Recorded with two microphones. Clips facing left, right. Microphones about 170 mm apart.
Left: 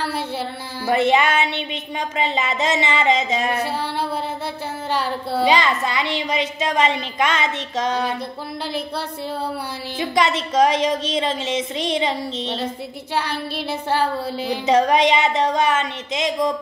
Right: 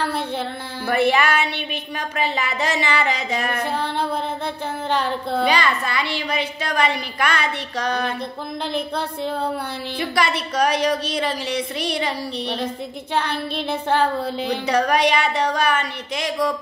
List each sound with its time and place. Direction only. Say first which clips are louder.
0.8 s speech: left 1 dB; 20° left (ahead or behind)
4.9 s child singing: even; 10° left (ahead or behind)
5.4 s speech: left 3 dB; 20° left (ahead or behind)
9.9 s speech: left 3 dB; 20° left (ahead or behind)
13.1 s child singing: right 1 dB; 10° left (ahead or behind)
14.7 s speech: left 3 dB; 20° left (ahead or behind)